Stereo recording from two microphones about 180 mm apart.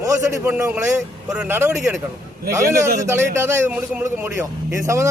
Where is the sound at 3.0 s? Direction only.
15° right (ahead or behind).